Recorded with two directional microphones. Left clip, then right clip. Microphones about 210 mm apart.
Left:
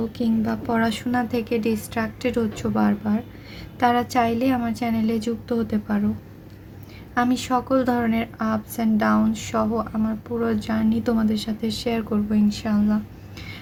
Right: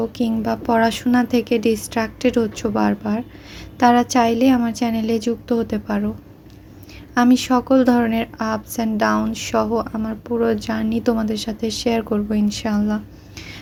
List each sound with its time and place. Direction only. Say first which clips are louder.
0.0 s a woman's voice: right 3 dB; 30° right (ahead or behind)
7.1 s a woman's voice: right 5 dB; 30° right (ahead or behind)